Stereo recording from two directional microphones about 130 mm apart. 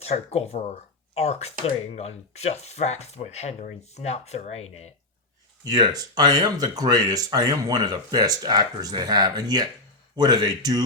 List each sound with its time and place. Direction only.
0.0 s speech: 55° left (ahead or behind)
5.6 s speech: 30° right (ahead or behind)